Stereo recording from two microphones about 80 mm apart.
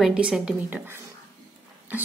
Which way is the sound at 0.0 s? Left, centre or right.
Centre.